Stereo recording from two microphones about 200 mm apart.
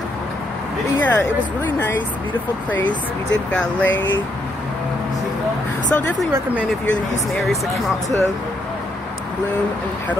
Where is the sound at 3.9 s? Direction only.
70° left (ahead or behind).